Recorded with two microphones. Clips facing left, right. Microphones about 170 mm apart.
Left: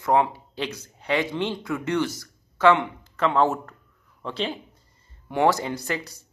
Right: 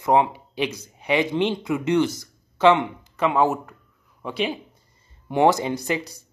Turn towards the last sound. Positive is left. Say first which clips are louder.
# right 4 dB
turn(degrees=-15)  # may be behind; listen again after turning